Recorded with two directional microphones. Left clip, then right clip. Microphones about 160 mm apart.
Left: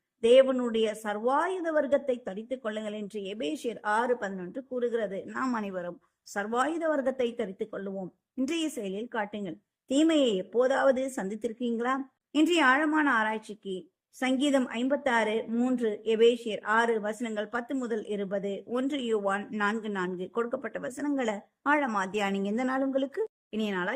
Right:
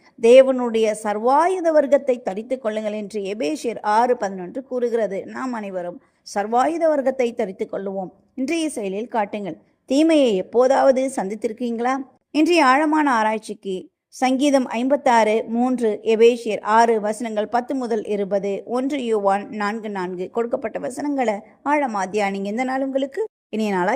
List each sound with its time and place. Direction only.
0.2 s a woman's voice: 25° right (ahead or behind)
23.5 s speech: 30° right (ahead or behind)